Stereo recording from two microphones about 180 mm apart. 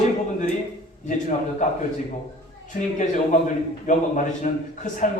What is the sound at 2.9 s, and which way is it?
A man's voice, 40° left (ahead or behind).